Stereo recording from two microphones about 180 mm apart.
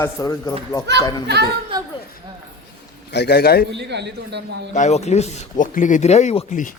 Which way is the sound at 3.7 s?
70° right (ahead or behind).